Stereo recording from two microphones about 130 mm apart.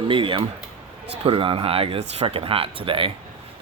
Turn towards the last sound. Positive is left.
turn(degrees=-40)  # may be behind; listen again after turning